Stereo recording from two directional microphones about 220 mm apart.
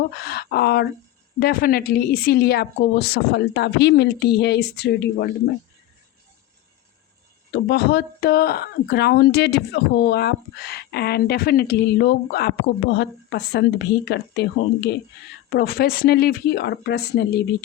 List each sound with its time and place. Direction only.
0.2 s speech: 45° left (ahead or behind)
7.5 s speech: 45° left (ahead or behind)